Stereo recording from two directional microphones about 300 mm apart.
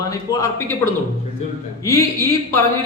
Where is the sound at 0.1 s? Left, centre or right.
Centre.